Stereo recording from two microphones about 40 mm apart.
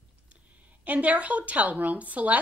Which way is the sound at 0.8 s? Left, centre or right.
Right.